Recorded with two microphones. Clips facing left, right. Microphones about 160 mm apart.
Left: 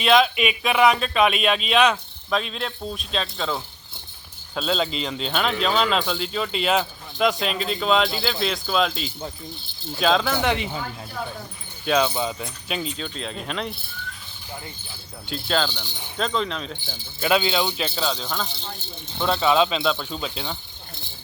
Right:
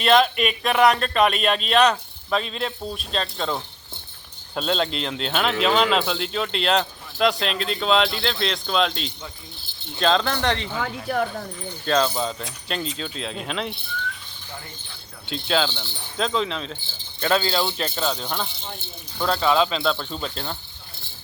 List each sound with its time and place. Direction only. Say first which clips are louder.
0.0 s speech: even; centre (ahead or behind)
10.8 s speech: right 7 dB; 75° right (ahead or behind)
11.9 s speech: even; 5° left (ahead or behind)
15.3 s speech: right 1 dB; centre (ahead or behind)
15.7 s speech: right 1 dB; 15° left (ahead or behind)
16.1 s speech: right 1 dB; centre (ahead or behind)
19.5 s speech: left 1 dB; 15° left (ahead or behind)